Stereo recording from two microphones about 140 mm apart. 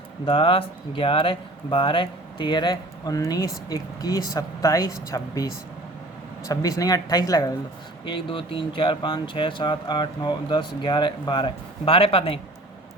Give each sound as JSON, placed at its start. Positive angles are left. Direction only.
{"t": 0.3, "sound": "speech", "side_deg": 40}
{"t": 6.5, "sound": "speech", "side_deg": 25}